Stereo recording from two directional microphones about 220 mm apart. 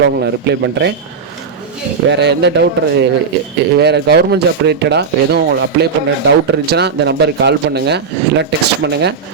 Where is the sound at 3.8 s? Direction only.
50° right (ahead or behind).